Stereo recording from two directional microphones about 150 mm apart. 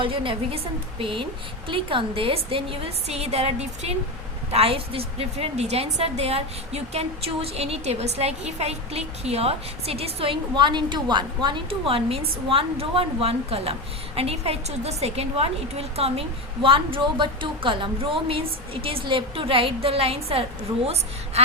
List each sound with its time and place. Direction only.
0.0 s a woman's voice: 35° right (ahead or behind)